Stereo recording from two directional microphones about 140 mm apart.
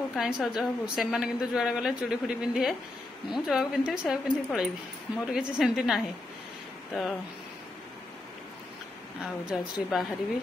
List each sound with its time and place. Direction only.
0.1 s a woman's voice: centre (ahead or behind)
9.2 s a woman's voice: 5° right (ahead or behind)